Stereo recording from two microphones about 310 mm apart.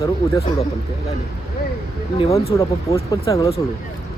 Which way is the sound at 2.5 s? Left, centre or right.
Centre.